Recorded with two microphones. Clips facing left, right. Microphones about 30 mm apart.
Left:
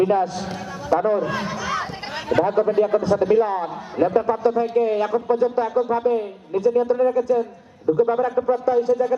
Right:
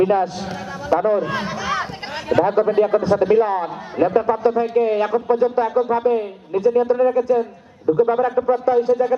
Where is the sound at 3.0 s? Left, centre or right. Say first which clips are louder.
Right 2 dB; right.